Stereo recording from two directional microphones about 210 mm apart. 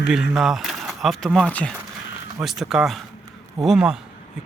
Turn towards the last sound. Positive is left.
turn(degrees=-5)  # may be behind; listen again after turning